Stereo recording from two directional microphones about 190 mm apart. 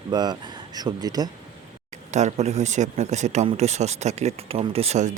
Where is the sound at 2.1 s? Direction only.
35° right (ahead or behind).